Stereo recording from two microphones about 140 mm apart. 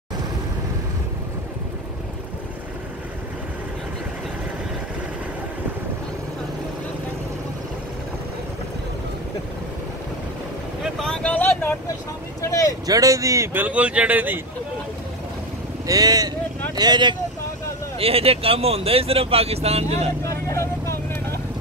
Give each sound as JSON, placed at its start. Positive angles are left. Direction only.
{"t": 10.8, "sound": "vehicle", "side_deg": 5}
{"t": 12.8, "sound": "speech", "side_deg": -25}
{"t": 15.9, "sound": "speech", "side_deg": -25}
{"t": 17.9, "sound": "speech", "side_deg": -45}
{"t": 20.2, "sound": "vehicle", "side_deg": 20}